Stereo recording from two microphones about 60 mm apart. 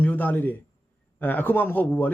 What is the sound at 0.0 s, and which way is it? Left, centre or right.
Speech, left.